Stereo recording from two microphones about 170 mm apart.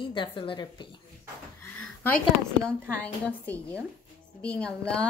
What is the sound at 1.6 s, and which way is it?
A woman's voice, 10° left (ahead or behind).